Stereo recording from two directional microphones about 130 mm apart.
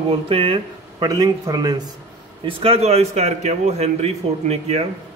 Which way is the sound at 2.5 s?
45° right (ahead or behind).